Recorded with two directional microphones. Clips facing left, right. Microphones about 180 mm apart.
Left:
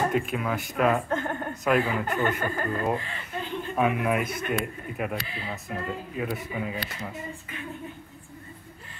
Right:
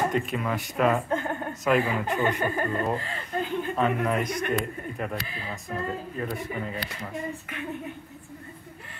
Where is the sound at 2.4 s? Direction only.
20° right (ahead or behind).